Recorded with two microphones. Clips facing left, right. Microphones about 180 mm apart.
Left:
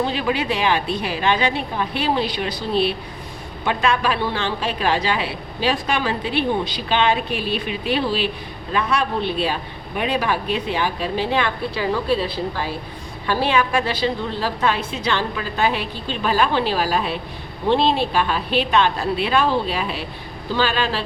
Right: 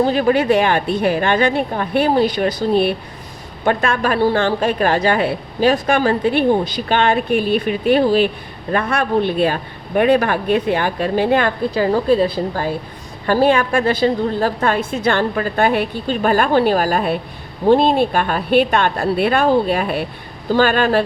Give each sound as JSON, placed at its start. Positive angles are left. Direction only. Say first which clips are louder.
{"t": 0.0, "sound": "a woman's voice", "louder": "right 7 dB", "side_deg": -45}